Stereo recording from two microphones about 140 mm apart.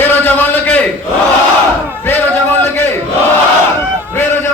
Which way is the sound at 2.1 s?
15° left (ahead or behind).